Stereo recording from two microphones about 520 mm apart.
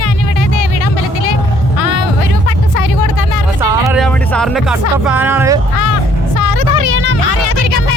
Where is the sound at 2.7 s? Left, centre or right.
Left.